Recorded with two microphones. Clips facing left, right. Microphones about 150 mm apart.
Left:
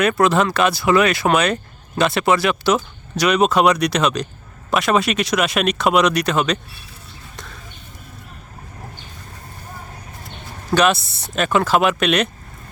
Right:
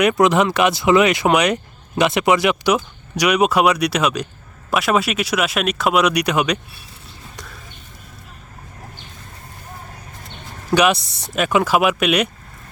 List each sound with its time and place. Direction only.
0.0 s speech: 15° right (ahead or behind)
10.8 s speech: 15° right (ahead or behind)